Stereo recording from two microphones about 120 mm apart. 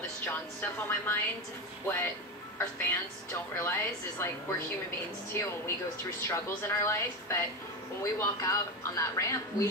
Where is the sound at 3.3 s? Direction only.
20° left (ahead or behind).